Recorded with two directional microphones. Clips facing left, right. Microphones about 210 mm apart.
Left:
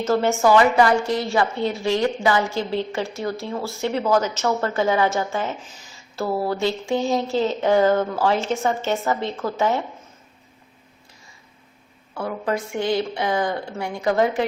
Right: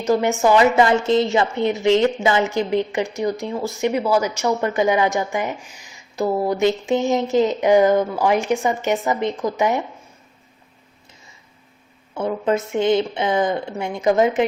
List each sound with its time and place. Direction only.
0.0 s a woman's voice: 15° right (ahead or behind)
12.1 s a woman's voice: 20° right (ahead or behind)